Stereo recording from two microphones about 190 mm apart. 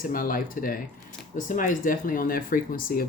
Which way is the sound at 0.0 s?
45° left (ahead or behind).